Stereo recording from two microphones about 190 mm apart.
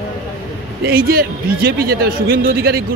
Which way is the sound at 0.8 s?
50° right (ahead or behind).